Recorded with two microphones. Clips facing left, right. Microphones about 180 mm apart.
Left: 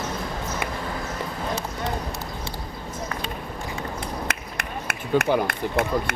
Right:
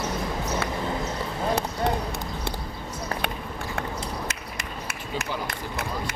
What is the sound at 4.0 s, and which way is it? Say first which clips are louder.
Run: left 2 dB; 60° left (ahead or behind).